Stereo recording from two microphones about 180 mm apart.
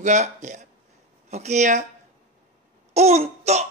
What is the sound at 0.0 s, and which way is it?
Speech, 40° right (ahead or behind).